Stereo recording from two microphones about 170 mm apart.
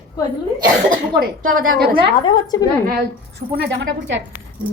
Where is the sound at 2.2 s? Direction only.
25° left (ahead or behind).